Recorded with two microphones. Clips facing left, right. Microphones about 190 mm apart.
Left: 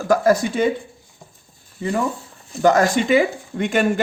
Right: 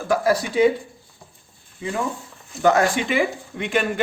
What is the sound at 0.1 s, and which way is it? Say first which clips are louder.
Speech: left 4 dB; 45° left (ahead or behind).